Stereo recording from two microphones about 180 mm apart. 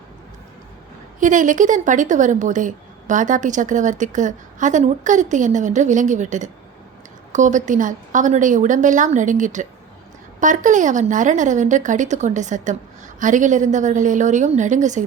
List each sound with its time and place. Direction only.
1.2 s a woman's voice: 45° right (ahead or behind)